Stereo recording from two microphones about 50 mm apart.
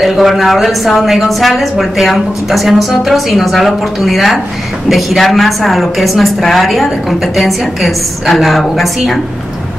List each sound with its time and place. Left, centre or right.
0.0 s a woman's voice: centre